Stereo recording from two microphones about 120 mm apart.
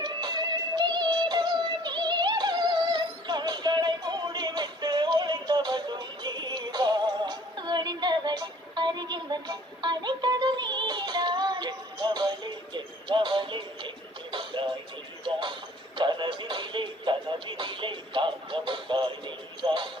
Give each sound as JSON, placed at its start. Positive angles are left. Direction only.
{"t": 0.0, "sound": "music", "side_deg": -35}
{"t": 19.6, "sound": "basketball bounce", "side_deg": -40}